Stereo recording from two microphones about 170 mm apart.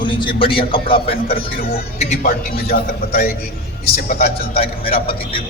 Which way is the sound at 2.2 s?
60° left (ahead or behind).